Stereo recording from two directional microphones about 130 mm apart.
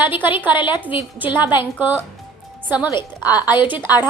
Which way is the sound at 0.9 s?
15° right (ahead or behind).